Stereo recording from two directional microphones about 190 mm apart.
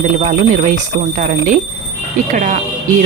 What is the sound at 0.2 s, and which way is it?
Speech, 40° right (ahead or behind).